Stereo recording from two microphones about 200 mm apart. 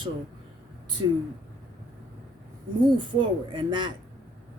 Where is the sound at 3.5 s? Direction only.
25° right (ahead or behind).